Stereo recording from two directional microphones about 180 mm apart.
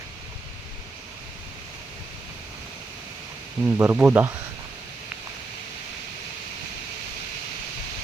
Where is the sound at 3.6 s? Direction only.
10° right (ahead or behind).